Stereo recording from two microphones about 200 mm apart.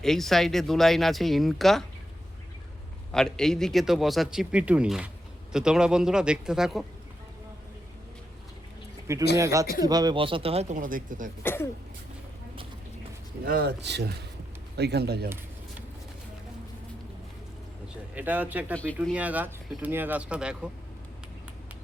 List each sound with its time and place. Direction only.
0.0 s a man's voice: centre (ahead or behind)
3.1 s a man's voice: 5° left (ahead or behind)
9.4 s speech: 15° right (ahead or behind); by 11.3 s 40° right (ahead or behind)
11.4 s speech: 10° left (ahead or behind)
13.4 s speech: 50° right (ahead or behind)
18.1 s speech: 10° right (ahead or behind)
18.7 s a man's voice: 5° left (ahead or behind)
19.0 s speech: 5° right (ahead or behind)